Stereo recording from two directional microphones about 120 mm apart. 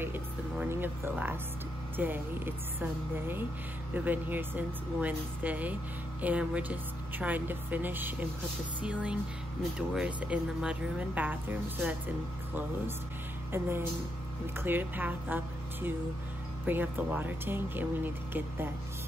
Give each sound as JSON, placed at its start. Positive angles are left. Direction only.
{"t": 0.0, "sound": "speech", "side_deg": -15}
{"t": 13.5, "sound": "speech", "side_deg": -20}